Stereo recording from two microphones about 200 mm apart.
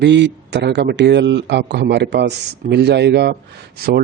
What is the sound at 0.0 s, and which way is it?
Speech, 60° right (ahead or behind).